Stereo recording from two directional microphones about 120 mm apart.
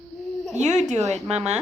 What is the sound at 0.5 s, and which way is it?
Speech, 70° right (ahead or behind).